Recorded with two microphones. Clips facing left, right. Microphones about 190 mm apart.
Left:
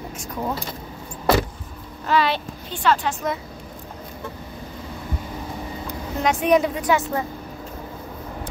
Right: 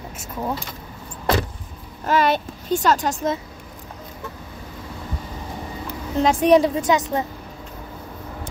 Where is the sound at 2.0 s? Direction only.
45° right (ahead or behind).